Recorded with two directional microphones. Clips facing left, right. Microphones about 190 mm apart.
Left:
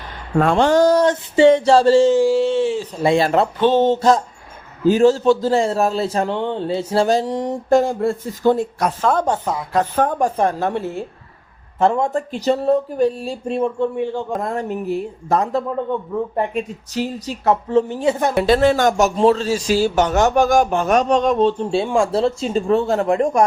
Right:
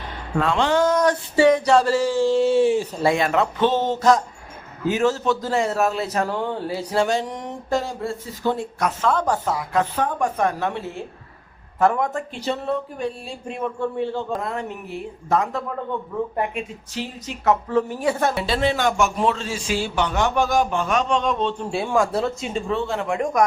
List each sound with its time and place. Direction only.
0.3 s a man's voice: 45° left (ahead or behind)
1.0 s speech: 25° left (ahead or behind)
2.2 s speech: 5° left (ahead or behind)
2.5 s speech: 10° right (ahead or behind)
3.2 s a man's voice: 35° left (ahead or behind)
7.7 s a man's voice: 50° left (ahead or behind)
9.2 s speech: 25° left (ahead or behind)
9.7 s a man's voice: 40° left (ahead or behind)
10.2 s a man's voice: 30° left (ahead or behind)
11.8 s a man's voice: 30° left (ahead or behind)
13.7 s a man's voice: 15° left (ahead or behind)
14.4 s a man's voice: 40° left (ahead or behind); by 18.3 s 20° left (ahead or behind)
18.3 s a man's voice: 50° left (ahead or behind)
21.6 s a man's voice: 25° left (ahead or behind)